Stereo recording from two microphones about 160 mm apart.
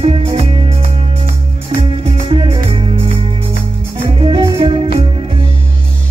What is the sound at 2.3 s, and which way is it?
Music, 30° right (ahead or behind).